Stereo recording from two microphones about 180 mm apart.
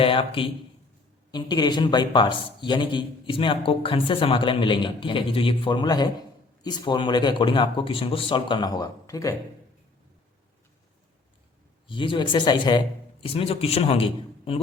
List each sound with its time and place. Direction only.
0.0 s a man's voice: 30° left (ahead or behind)
11.9 s a man's voice: 25° left (ahead or behind)